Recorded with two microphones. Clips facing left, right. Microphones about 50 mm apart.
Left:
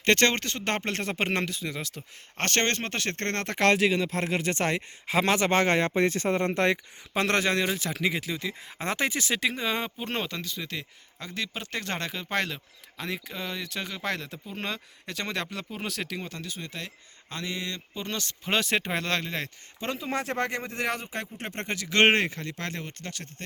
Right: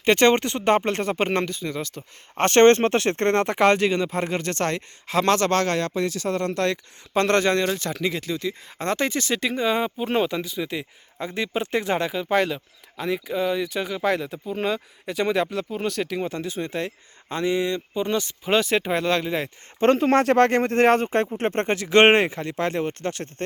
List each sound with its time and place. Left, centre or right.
0.0 s speech: centre
2.3 s speech: right; by 6.7 s left
7.1 s speech: centre
16.3 s speech: right; by 19.5 s centre
19.8 s speech: right
20.5 s speech: right